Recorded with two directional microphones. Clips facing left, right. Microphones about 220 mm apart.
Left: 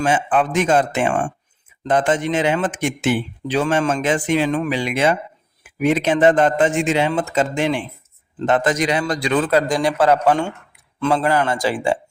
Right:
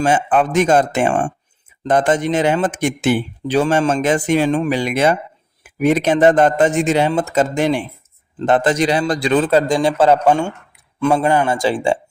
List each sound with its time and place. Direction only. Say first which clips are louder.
0.0 s speech: right 3 dB; 40° right (ahead or behind)
4.4 s speech: right 3 dB; 30° right (ahead or behind)